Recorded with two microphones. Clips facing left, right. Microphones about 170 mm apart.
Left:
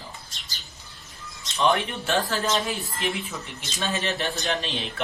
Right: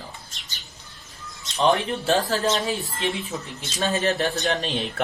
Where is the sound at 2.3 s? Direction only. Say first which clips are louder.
Right 3 dB; 35° right (ahead or behind).